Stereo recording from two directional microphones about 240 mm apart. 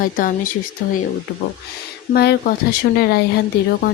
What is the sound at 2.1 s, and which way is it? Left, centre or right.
Speech, left.